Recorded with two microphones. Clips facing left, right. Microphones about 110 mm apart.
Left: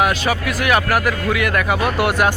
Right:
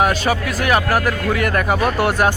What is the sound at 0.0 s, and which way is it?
Speech, 40° right (ahead or behind).